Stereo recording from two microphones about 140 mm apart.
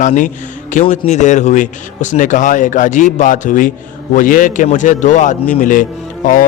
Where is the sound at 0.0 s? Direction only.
65° left (ahead or behind).